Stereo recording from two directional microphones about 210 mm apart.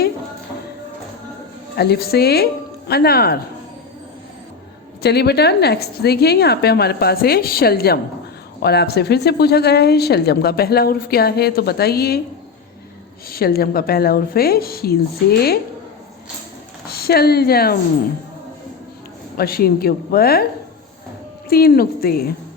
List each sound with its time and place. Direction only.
1.7 s speech: 50° left (ahead or behind)
5.0 s speech: 50° left (ahead or behind)
13.3 s speech: 45° left (ahead or behind)
16.9 s speech: 45° left (ahead or behind)
19.4 s speech: 45° left (ahead or behind)
21.5 s speech: 45° left (ahead or behind)